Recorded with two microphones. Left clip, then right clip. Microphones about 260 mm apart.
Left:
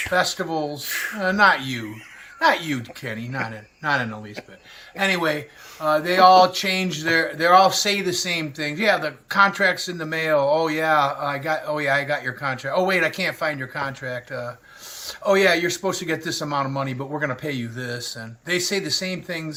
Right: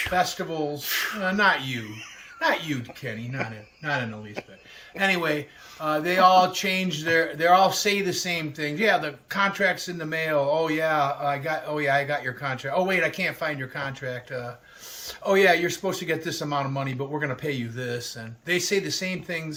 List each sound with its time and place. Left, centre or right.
0.1 s speech: centre
0.9 s speech: centre
1.3 s speech: centre
4.9 s speech: centre
11.0 s speech: centre
11.4 s speech: centre